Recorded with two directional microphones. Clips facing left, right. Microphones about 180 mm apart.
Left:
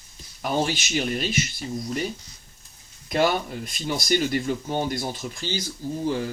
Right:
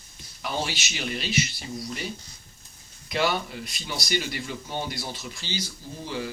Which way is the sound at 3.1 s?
45° left (ahead or behind).